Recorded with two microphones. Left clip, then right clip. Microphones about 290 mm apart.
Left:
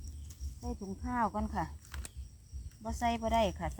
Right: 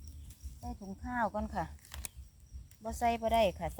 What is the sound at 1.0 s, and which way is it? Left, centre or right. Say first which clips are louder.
Cricket: left 1 dB; right.